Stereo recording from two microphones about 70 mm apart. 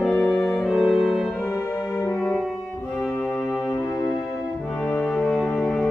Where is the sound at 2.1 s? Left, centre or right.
Centre.